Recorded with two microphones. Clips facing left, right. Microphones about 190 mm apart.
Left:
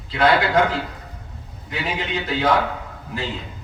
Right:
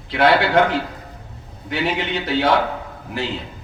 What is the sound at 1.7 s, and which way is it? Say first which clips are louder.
Speech: right 4 dB; 70° right (ahead or behind).